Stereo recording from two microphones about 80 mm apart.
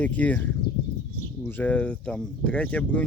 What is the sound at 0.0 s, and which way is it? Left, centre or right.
Speech, centre.